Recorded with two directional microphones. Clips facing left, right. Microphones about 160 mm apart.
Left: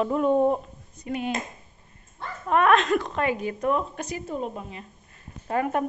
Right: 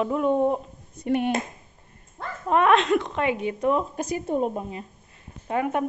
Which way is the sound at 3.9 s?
45° right (ahead or behind).